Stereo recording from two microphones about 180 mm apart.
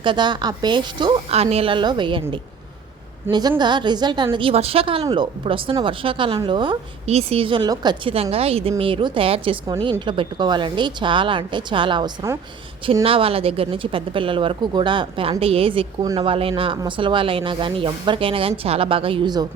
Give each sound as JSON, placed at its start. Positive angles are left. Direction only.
{"t": 0.0, "sound": "speech", "side_deg": -25}
{"t": 3.6, "sound": "speech", "side_deg": -25}
{"t": 12.8, "sound": "a woman's voice", "side_deg": -30}